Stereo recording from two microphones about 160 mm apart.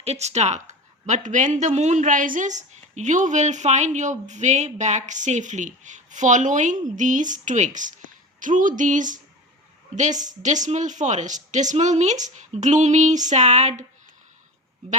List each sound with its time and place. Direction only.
0.0 s speech: 40° right (ahead or behind)